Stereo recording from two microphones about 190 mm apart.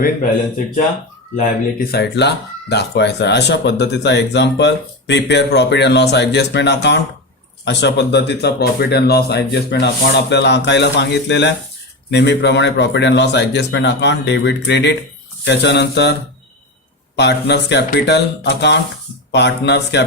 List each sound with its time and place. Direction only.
1.4 s speech: 55° left (ahead or behind)
17.2 s speech: 65° left (ahead or behind)